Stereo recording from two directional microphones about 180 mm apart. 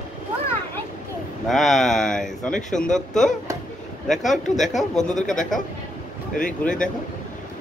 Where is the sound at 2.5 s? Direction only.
45° left (ahead or behind).